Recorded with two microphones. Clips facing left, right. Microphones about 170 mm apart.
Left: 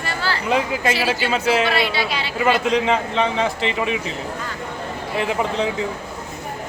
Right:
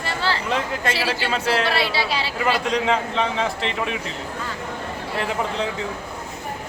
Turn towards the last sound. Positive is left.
turn(degrees=5)  # may be behind; listen again after turning